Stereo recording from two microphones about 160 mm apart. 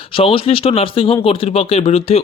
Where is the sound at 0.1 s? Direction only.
35° left (ahead or behind).